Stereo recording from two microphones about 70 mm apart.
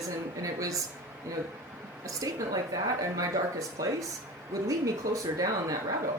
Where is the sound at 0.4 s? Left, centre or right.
Right.